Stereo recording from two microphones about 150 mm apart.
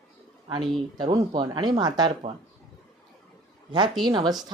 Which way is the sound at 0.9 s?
30° right (ahead or behind).